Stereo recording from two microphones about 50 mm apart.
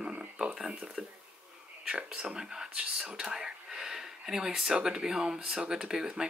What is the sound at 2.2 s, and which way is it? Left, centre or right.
Speech, centre.